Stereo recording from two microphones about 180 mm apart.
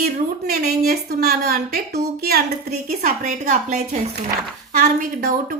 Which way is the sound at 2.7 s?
40° right (ahead or behind).